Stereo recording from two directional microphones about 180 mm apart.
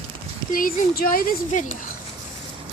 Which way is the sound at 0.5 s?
55° left (ahead or behind).